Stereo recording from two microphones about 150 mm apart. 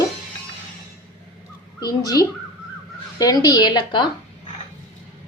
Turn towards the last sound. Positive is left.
turn(degrees=30)  # may be behind; listen again after turning